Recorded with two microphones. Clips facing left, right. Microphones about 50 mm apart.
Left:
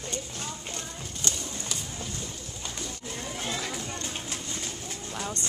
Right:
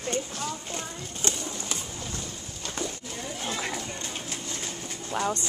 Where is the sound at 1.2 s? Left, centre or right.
Right.